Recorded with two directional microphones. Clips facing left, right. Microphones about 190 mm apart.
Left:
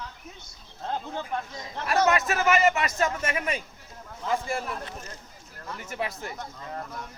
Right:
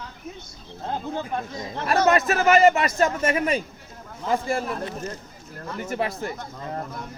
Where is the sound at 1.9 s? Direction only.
35° right (ahead or behind).